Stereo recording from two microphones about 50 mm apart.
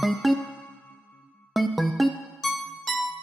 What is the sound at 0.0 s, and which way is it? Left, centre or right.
Music, centre.